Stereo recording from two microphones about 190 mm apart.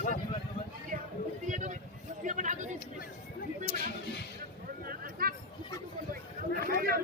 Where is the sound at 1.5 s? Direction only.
40° right (ahead or behind).